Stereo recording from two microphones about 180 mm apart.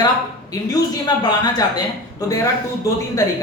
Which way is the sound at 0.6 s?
20° left (ahead or behind).